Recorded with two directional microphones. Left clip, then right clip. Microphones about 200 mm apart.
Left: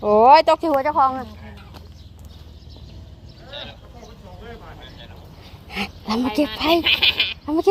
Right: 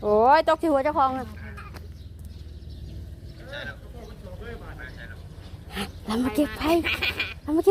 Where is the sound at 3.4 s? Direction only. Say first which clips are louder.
Left 1 dB; 30° right (ahead or behind).